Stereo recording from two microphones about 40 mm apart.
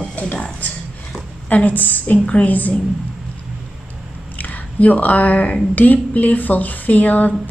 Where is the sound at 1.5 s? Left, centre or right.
Left.